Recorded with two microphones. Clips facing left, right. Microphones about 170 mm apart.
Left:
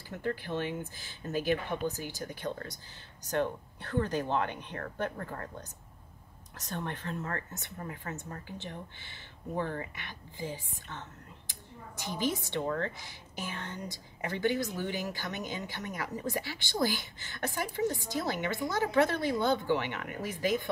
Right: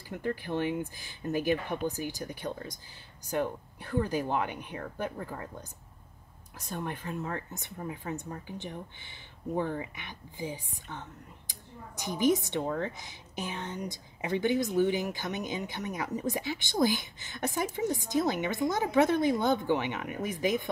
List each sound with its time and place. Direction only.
0.1 s a woman's voice: 15° right (ahead or behind)